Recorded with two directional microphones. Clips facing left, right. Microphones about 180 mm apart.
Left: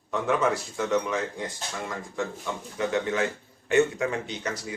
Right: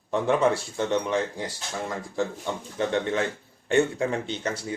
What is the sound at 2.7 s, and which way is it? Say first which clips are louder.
Speech: right 1 dB; 30° right (ahead or behind).